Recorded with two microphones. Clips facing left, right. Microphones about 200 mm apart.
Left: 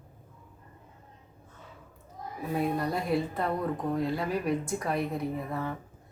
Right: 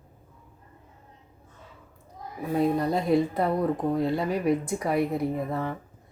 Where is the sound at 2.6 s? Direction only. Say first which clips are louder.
Right 6 dB; 20° right (ahead or behind).